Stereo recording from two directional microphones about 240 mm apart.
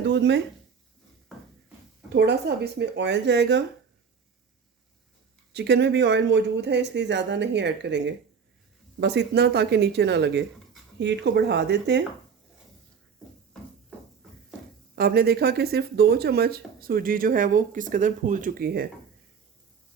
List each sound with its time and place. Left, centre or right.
0.0 s speech: right
1.3 s music: centre
2.7 s speech: right
5.5 s speech: right
14.9 s speech: right